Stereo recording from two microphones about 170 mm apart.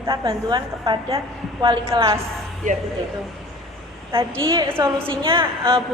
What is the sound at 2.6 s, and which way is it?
Speech, 50° right (ahead or behind).